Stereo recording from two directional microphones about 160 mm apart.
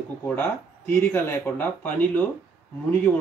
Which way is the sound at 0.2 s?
15° left (ahead or behind).